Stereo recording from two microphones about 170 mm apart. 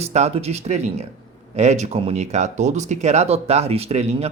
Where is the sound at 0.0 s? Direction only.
40° right (ahead or behind).